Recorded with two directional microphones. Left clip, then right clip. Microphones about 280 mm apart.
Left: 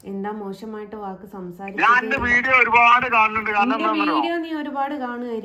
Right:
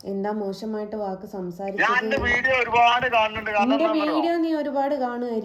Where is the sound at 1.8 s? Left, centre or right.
Left.